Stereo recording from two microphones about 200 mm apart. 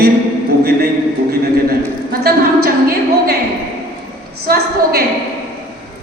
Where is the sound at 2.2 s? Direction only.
50° right (ahead or behind).